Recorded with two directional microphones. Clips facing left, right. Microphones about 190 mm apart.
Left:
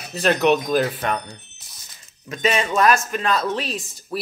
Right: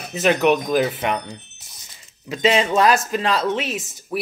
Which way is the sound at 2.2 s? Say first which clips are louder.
Right 3 dB; 20° right (ahead or behind).